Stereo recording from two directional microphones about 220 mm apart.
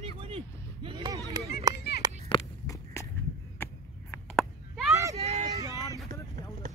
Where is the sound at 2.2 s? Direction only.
20° left (ahead or behind).